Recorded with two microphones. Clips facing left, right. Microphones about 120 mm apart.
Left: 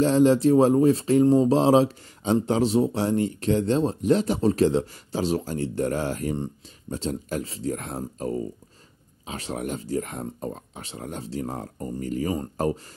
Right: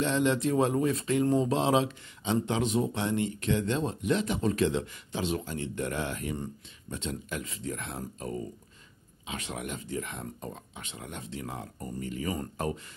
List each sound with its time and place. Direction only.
0.0 s speech: 35° left (ahead or behind)